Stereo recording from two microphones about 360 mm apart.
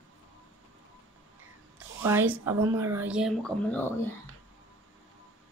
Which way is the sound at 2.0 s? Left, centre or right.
Centre.